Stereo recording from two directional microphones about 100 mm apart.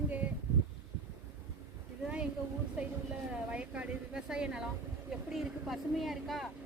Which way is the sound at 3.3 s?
10° right (ahead or behind).